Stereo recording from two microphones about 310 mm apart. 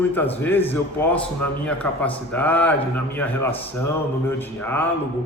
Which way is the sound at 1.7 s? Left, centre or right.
Centre.